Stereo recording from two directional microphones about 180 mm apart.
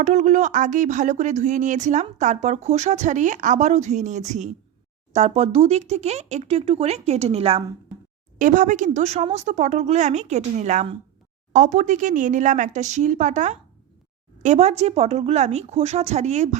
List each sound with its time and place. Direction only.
0.0 s a woman's voice: 40° right (ahead or behind)
8.4 s a woman's voice: 45° right (ahead or behind)